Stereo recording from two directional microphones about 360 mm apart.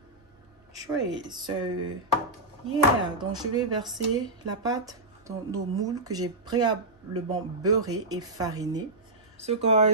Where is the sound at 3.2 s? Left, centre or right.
Centre.